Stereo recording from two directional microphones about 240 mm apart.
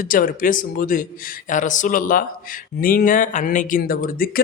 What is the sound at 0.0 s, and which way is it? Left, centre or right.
Speech, left.